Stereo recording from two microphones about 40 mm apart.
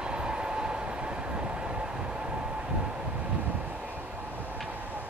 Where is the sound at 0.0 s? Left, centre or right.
Right.